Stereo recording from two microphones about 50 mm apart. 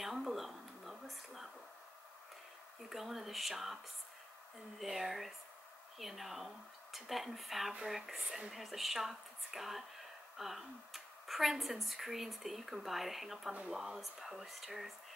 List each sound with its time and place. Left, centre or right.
0.0 s a sound: centre
2.9 s speech: centre
13.5 s speech: right
13.7 s speech: centre